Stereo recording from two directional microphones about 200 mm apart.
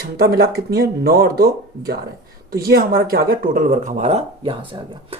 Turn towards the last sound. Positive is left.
turn(degrees=-25)  # may be behind; listen again after turning